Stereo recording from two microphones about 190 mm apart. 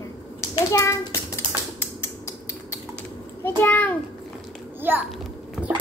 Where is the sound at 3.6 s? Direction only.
10° left (ahead or behind).